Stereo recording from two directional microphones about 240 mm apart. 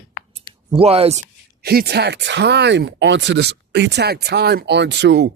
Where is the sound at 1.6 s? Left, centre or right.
Right.